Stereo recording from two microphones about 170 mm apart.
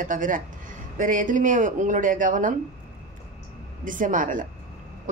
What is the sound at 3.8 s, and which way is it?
Speech, 50° right (ahead or behind).